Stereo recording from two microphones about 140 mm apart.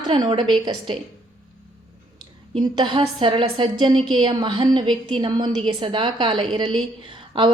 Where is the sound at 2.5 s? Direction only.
35° right (ahead or behind).